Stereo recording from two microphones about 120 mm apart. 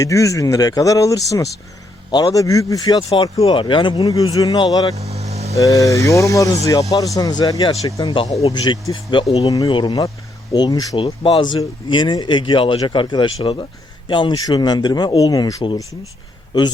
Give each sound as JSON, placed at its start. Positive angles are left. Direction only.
{"t": 0.0, "sound": "speech", "side_deg": 25}
{"t": 3.0, "sound": "speech", "side_deg": 55}
{"t": 4.9, "sound": "vehicle", "side_deg": -65}
{"t": 5.5, "sound": "speech", "side_deg": 30}
{"t": 8.3, "sound": "speech", "side_deg": 55}
{"t": 8.5, "sound": "speech", "side_deg": 40}
{"t": 10.9, "sound": "speech", "side_deg": 45}